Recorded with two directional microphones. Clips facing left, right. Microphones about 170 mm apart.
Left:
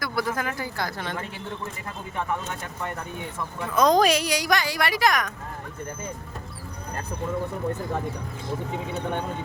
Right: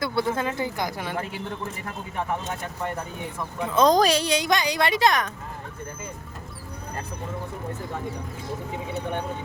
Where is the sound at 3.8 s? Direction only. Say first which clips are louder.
Even; 35° right (ahead or behind).